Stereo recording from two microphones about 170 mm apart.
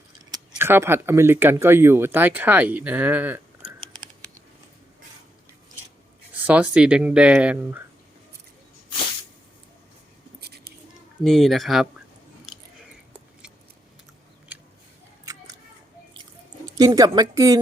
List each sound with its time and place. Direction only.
0.5 s speech: 15° right (ahead or behind)
6.3 s speech: 10° right (ahead or behind)
10.4 s a sound: 70° right (ahead or behind)
11.2 s speech: centre (ahead or behind)
14.5 s a sound: 5° right (ahead or behind)
16.6 s speech: 25° right (ahead or behind)